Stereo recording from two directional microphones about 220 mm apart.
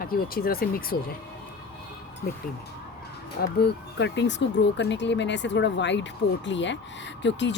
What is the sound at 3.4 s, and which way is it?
Speech, 50° left (ahead or behind).